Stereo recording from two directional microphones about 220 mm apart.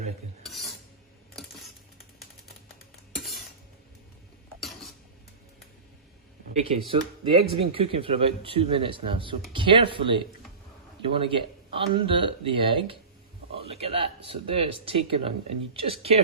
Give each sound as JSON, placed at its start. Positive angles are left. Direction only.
{"t": 0.4, "sound": "stir", "side_deg": 0}
{"t": 3.2, "sound": "cutlery", "side_deg": 0}
{"t": 4.6, "sound": "cutlery", "side_deg": 0}
{"t": 6.5, "sound": "speech", "side_deg": -25}